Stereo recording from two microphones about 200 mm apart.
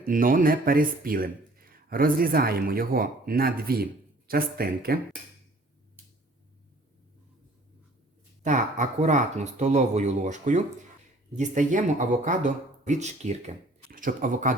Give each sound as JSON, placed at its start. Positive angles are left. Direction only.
{"t": 0.0, "sound": "speech", "side_deg": -45}
{"t": 8.4, "sound": "speech", "side_deg": -40}